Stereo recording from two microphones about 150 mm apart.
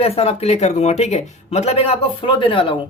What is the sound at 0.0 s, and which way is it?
Speech, 40° left (ahead or behind).